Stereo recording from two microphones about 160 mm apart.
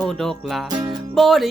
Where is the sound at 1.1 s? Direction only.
Centre (ahead or behind).